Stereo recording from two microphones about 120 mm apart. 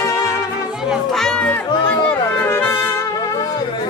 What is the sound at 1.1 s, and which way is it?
Music, 5° left (ahead or behind).